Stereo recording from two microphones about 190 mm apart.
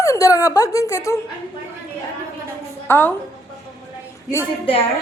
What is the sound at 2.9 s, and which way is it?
Speech, 10° left (ahead or behind).